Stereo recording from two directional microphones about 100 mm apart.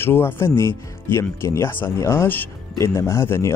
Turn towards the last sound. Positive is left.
turn(degrees=25)  # may be behind; listen again after turning